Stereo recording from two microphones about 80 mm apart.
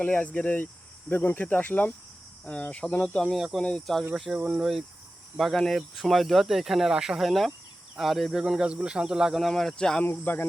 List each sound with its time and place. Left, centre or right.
0.0 s cricket: centre
2.4 s speech: centre
3.3 s speech: centre
3.6 s speech: centre
4.1 s speech: centre
10.0 s cricket: left